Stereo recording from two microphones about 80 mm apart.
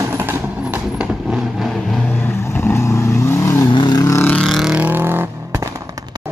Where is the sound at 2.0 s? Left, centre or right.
Left.